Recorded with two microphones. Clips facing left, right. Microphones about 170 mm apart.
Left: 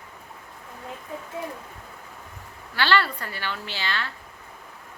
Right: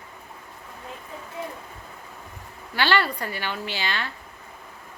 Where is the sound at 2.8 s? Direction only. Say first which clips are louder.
Even; 15° right (ahead or behind).